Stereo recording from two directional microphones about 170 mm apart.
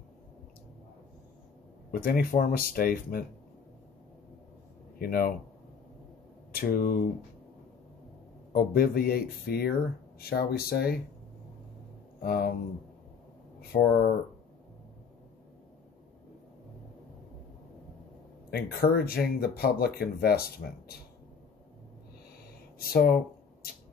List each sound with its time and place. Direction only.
1.9 s speech: 60° left (ahead or behind)
4.9 s speech: 60° left (ahead or behind)
6.5 s speech: 60° left (ahead or behind)
8.5 s speech: 60° left (ahead or behind)
12.2 s speech: 60° left (ahead or behind)
18.5 s speech: 65° left (ahead or behind)
22.8 s speech: 65° left (ahead or behind)